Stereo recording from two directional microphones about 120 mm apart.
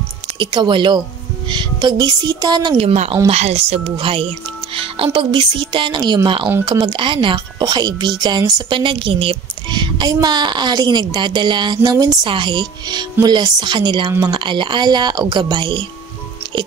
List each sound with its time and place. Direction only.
0.4 s a woman's voice: 40° right (ahead or behind)
2.8 s a woman's voice: 65° right (ahead or behind); by 8.7 s 30° right (ahead or behind)
8.7 s a woman's voice: 45° right (ahead or behind)